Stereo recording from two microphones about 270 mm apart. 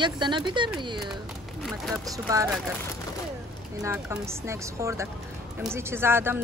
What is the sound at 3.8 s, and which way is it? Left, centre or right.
A woman's voice, centre.